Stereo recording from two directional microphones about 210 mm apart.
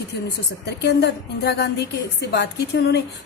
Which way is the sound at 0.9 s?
55° left (ahead or behind).